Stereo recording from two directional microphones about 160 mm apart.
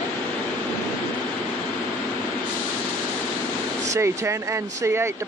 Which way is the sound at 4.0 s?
15° right (ahead or behind).